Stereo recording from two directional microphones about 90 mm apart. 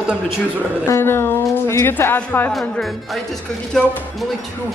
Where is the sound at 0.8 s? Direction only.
30° left (ahead or behind).